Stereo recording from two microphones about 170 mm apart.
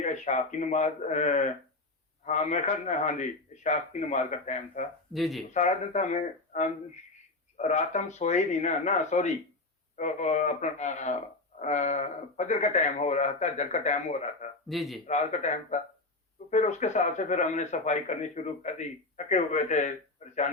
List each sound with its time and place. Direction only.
0.0 s a man's voice: 45° left (ahead or behind)
5.1 s speech: centre (ahead or behind)
5.5 s a man's voice: 45° left (ahead or behind)
14.7 s speech: centre (ahead or behind)
15.0 s a man's voice: 45° left (ahead or behind)